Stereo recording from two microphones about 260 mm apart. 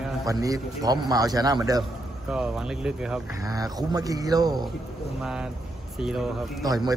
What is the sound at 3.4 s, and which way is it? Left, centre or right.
A man's voice, centre.